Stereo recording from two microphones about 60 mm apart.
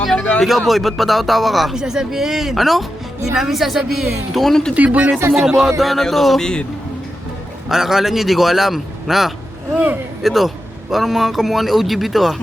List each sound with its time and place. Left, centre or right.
0.0 s speech: centre
4.7 s speech: right
5.3 s speech: centre
7.7 s speech: centre
9.7 s speech: right
10.2 s speech: centre